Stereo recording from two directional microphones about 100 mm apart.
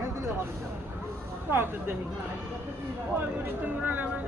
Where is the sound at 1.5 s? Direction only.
20° right (ahead or behind).